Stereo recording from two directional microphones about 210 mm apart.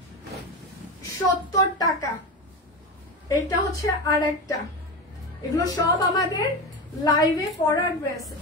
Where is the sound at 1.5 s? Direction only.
20° left (ahead or behind).